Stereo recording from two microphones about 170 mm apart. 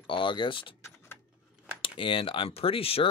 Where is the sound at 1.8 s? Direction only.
30° left (ahead or behind).